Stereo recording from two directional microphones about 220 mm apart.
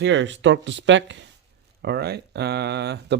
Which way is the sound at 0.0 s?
55° right (ahead or behind).